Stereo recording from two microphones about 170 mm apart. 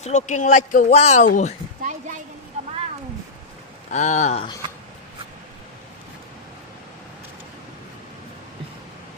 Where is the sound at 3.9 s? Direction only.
45° left (ahead or behind).